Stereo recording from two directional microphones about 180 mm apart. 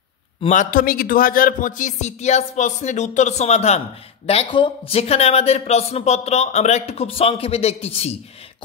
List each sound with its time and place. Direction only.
0.5 s a man's voice: 45° left (ahead or behind)